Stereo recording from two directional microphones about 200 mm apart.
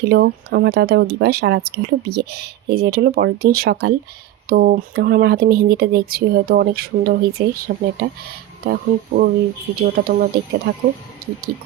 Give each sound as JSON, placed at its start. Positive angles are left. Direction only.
{"t": 0.1, "sound": "speech", "side_deg": -55}
{"t": 10.7, "sound": "speech", "side_deg": -60}